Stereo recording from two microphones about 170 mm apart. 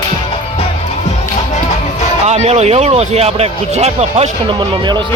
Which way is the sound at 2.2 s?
40° right (ahead or behind).